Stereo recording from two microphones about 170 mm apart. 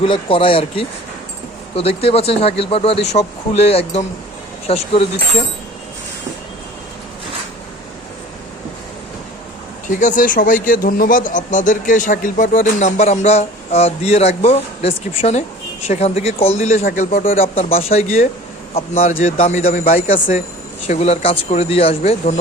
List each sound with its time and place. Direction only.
0.0 s speech: 30° left (ahead or behind)
10.0 s speech: 50° left (ahead or behind)
17.4 s speech: 35° left (ahead or behind); by 19.9 s 50° left (ahead or behind)
19.9 s speech: 35° left (ahead or behind)